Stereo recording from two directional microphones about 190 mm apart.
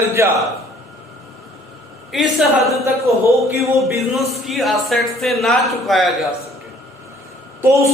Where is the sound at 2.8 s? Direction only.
15° right (ahead or behind).